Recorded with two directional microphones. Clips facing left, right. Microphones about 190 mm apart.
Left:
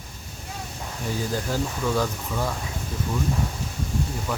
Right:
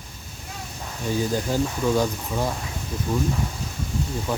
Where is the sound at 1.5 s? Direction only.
20° right (ahead or behind).